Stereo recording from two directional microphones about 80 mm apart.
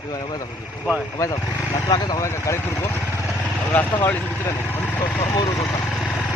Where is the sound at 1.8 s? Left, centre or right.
Left.